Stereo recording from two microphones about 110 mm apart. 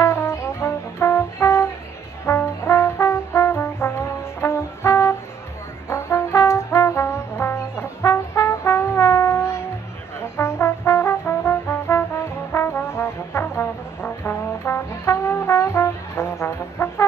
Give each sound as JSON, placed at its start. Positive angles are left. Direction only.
{"t": 0.0, "sound": "music", "side_deg": 25}
{"t": 2.2, "sound": "brass instrument", "side_deg": 25}